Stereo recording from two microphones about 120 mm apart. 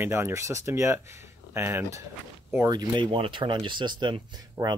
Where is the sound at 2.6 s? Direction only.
35° right (ahead or behind).